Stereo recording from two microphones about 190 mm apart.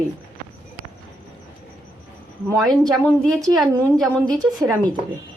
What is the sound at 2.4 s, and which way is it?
Speech, 15° right (ahead or behind).